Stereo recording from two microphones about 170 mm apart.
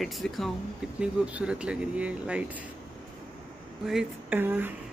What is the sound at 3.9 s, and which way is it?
Speech, 5° right (ahead or behind).